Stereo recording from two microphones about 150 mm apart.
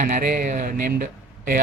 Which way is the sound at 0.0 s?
65° right (ahead or behind).